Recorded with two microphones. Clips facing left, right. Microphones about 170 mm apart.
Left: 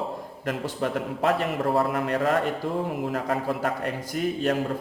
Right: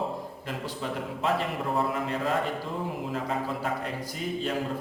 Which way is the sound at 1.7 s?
65° left (ahead or behind).